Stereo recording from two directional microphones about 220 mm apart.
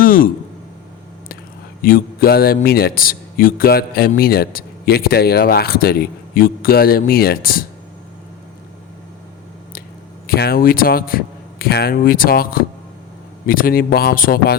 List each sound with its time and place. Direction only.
0.0 s a sound: 40° left (ahead or behind)
1.8 s a man's voice: 40° left (ahead or behind)
10.2 s a man's voice: 45° left (ahead or behind)